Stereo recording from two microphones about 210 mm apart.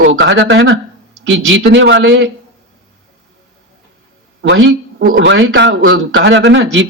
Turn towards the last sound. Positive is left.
turn(degrees=-60)  # may be behind; listen again after turning